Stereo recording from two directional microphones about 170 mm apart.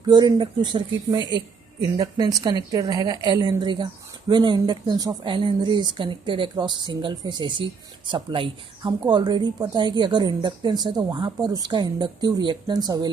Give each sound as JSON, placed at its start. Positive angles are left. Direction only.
{"t": 0.0, "sound": "speech", "side_deg": -25}